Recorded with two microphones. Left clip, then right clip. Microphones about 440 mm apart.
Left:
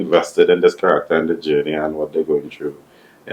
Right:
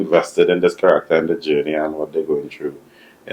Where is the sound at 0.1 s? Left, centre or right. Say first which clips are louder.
Left 2 dB; centre.